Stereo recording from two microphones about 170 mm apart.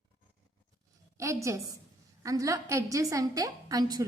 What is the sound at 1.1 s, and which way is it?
A woman's voice, 15° right (ahead or behind).